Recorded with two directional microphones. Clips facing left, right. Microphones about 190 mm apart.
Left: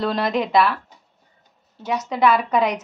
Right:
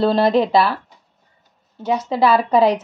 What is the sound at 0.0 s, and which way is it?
Speech, 30° right (ahead or behind).